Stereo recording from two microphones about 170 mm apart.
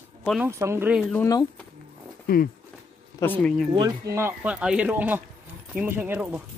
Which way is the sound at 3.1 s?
10° left (ahead or behind).